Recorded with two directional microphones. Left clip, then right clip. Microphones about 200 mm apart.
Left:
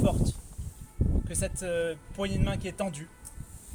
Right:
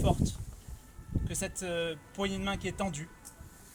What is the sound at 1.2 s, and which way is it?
Speech, centre (ahead or behind).